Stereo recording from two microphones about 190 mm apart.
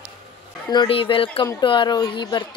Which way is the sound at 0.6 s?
25° left (ahead or behind).